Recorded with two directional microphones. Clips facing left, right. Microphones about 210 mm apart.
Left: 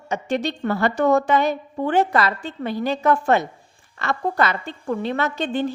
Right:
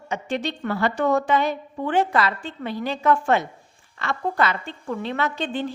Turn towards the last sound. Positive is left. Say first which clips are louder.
# left 3 dB
turn(degrees=45)  # may be behind; listen again after turning